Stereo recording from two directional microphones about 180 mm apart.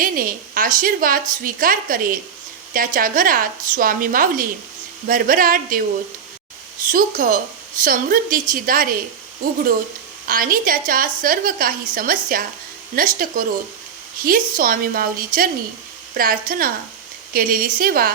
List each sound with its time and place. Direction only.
0.0 s a woman's voice: 50° right (ahead or behind)